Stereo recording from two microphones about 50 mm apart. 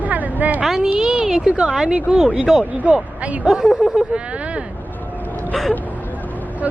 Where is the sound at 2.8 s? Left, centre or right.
Right.